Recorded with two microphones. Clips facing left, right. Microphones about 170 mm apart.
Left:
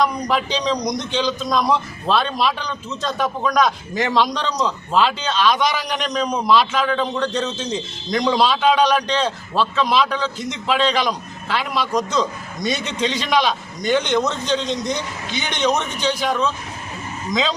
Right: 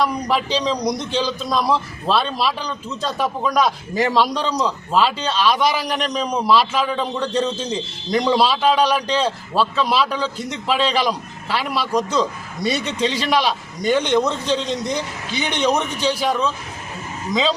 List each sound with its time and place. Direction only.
0.0 s a man's voice: 5° right (ahead or behind)
10.3 s a man's voice: 35° right (ahead or behind)
10.7 s a man's voice: 5° right (ahead or behind)
12.6 s a man's voice: 35° right (ahead or behind)
13.2 s a man's voice: 5° right (ahead or behind)
14.0 s a man's voice: 30° right (ahead or behind)
16.2 s a man's voice: 5° right (ahead or behind)